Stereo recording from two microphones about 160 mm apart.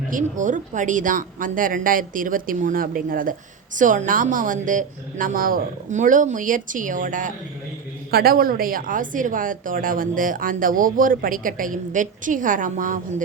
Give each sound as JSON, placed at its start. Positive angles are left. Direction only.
{"t": 0.1, "sound": "a woman's voice", "side_deg": -55}
{"t": 8.1, "sound": "a woman's voice", "side_deg": -65}